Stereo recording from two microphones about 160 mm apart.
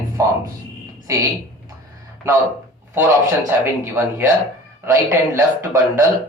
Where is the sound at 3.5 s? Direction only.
15° right (ahead or behind).